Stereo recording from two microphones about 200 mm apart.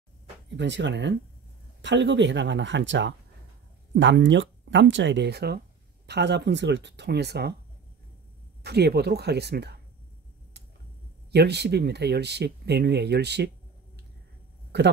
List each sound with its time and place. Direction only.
0.6 s speech: 65° right (ahead or behind)
8.6 s speech: 55° right (ahead or behind)
11.3 s speech: 55° right (ahead or behind)